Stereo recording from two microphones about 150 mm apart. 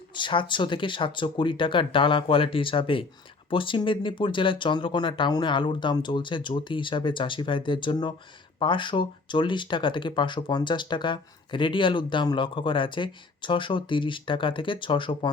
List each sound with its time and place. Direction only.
0.1 s speech: 30° left (ahead or behind)